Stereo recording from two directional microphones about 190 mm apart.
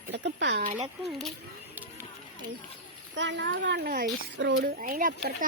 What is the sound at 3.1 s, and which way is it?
Speech, 70° right (ahead or behind).